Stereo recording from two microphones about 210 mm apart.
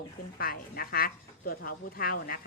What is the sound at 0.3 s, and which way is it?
Speech, 45° left (ahead or behind).